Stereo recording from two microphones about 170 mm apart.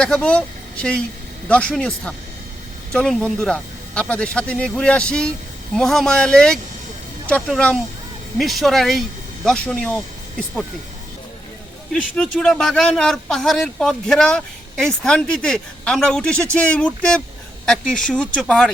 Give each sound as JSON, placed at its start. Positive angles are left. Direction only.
{"t": 0.0, "sound": "a man's voice", "side_deg": 5}
{"t": 11.9, "sound": "a man's voice", "side_deg": 5}